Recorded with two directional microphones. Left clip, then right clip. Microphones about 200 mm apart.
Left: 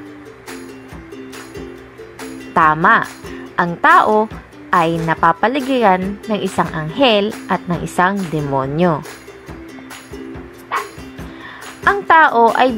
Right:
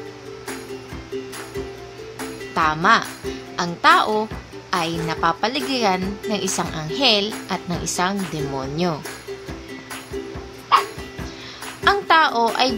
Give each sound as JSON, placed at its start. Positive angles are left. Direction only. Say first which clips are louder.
{"t": 2.5, "sound": "speech", "louder": "left 5 dB", "side_deg": 20}
{"t": 11.8, "sound": "music", "louder": "left 5 dB", "side_deg": 20}